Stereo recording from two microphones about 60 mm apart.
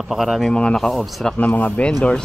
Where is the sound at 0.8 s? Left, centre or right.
Centre.